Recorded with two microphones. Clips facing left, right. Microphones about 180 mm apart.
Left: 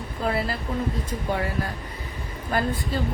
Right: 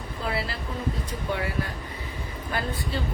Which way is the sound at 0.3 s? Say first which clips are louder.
Left 4 dB; 45° left (ahead or behind).